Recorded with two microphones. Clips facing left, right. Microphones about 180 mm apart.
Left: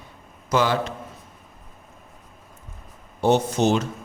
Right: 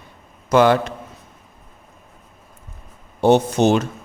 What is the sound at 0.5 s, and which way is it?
Speech, 60° right (ahead or behind).